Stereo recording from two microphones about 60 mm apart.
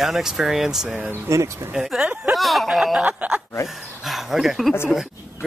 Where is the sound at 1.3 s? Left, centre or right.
Right.